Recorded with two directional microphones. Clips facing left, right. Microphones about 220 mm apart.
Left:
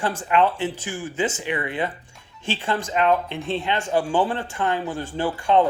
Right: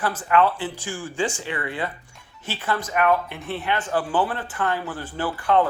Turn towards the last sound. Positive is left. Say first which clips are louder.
# left 1 dB
turn(degrees=15)  # may be behind; listen again after turning